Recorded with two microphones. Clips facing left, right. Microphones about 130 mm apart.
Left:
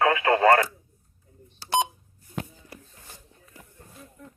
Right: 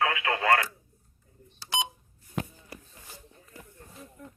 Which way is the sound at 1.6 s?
50° left (ahead or behind).